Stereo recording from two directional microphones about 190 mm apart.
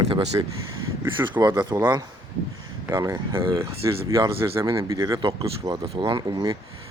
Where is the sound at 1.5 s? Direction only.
10° right (ahead or behind).